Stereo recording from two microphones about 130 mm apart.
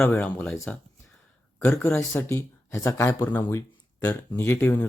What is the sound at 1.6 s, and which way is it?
Speech, 20° left (ahead or behind).